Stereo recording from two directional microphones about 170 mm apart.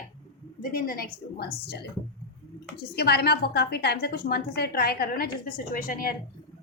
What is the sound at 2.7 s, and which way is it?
A woman's voice, 70° left (ahead or behind).